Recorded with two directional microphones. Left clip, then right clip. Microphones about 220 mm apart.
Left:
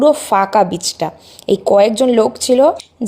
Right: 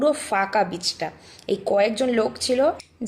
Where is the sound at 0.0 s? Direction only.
30° left (ahead or behind).